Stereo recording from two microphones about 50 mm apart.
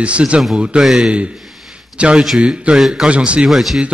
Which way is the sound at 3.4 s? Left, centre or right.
Centre.